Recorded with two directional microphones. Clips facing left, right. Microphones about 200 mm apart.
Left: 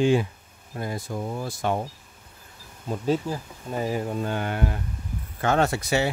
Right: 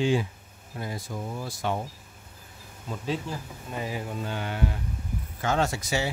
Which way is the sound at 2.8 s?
45° left (ahead or behind).